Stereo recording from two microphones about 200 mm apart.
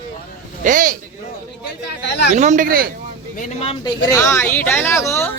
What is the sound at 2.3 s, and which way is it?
Speech, 35° right (ahead or behind).